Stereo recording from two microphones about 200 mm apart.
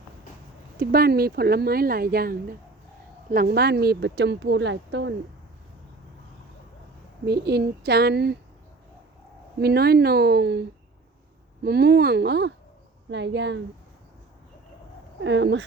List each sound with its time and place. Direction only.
0.8 s speech: 50° right (ahead or behind)
7.3 s speech: 55° right (ahead or behind)
9.6 s speech: 55° right (ahead or behind)
11.6 s speech: 55° right (ahead or behind)
15.2 s speech: 65° right (ahead or behind)